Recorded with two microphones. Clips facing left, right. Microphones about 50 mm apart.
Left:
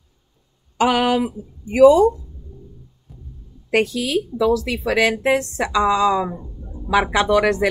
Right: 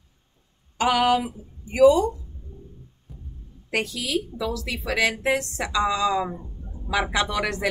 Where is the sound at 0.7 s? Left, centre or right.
Left.